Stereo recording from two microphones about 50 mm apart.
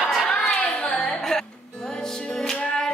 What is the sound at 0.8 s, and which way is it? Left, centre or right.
Music, centre.